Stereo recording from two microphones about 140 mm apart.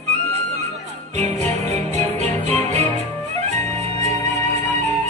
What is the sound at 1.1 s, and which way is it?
Music, 55° right (ahead or behind).